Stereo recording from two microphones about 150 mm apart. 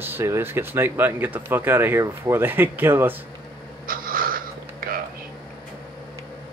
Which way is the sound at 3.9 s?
70° right (ahead or behind).